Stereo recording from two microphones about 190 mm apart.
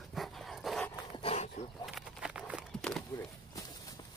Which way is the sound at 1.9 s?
Centre (ahead or behind).